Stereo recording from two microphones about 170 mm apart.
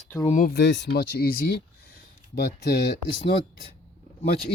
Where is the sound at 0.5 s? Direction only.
90° left; by 1.6 s 60° left (ahead or behind).